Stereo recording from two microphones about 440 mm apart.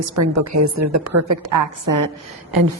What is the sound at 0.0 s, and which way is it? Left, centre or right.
A woman's voice, right.